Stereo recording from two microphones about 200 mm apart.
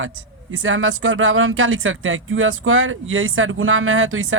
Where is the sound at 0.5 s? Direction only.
80° right.